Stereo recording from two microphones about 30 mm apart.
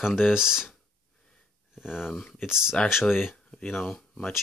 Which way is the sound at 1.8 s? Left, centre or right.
Centre.